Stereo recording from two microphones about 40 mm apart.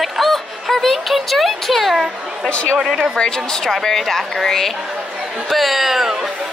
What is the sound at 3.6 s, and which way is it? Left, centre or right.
Speech, centre.